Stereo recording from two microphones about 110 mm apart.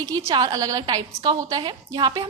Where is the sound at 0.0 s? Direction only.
35° right (ahead or behind).